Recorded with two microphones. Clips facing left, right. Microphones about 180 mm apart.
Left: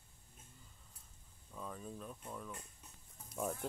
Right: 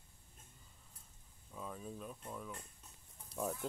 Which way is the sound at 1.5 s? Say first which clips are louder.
Even; 5° right (ahead or behind).